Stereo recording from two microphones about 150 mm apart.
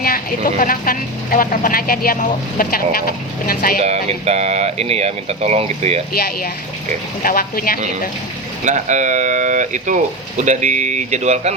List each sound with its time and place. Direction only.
0.0 s a woman's voice: 70° left (ahead or behind)
3.8 s speech: 45° right (ahead or behind)
7.2 s a woman's voice: 70° left (ahead or behind)
8.6 s speech: 55° right (ahead or behind)